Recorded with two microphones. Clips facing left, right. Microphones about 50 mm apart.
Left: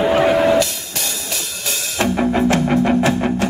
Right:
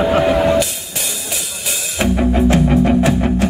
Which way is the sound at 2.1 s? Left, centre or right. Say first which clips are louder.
Right 2 dB; left.